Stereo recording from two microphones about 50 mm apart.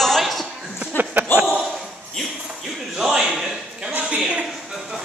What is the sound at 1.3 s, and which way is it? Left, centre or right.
Basketball bounce, left.